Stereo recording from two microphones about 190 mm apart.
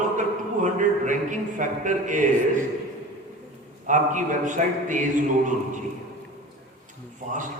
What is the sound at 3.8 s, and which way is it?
Speech, 40° right (ahead or behind).